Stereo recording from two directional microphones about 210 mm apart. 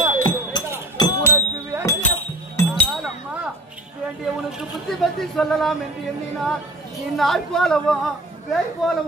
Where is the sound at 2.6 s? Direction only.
15° left (ahead or behind).